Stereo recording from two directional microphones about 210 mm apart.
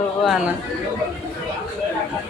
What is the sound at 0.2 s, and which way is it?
Speech, centre (ahead or behind).